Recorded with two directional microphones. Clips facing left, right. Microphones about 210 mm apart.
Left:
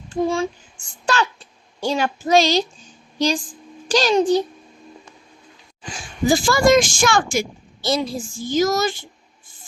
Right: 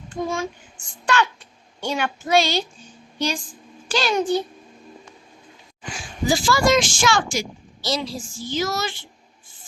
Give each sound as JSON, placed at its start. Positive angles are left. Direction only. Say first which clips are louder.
{"t": 0.1, "sound": "female singing", "louder": "left 5 dB", "side_deg": 30}
{"t": 1.0, "sound": "child singing", "louder": "even", "side_deg": 35}
{"t": 3.2, "sound": "a woman's voice", "louder": "left 5 dB", "side_deg": 35}
{"t": 3.8, "sound": "child singing", "louder": "left 5 dB", "side_deg": 40}
{"t": 6.2, "sound": "a woman's voice", "louder": "left 4 dB", "side_deg": 50}